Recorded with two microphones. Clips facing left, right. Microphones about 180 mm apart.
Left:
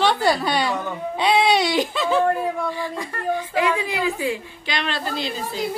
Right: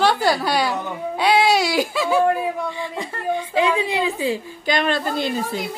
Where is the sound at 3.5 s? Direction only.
25° right (ahead or behind).